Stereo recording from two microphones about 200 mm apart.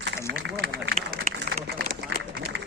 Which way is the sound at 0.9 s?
45° right (ahead or behind).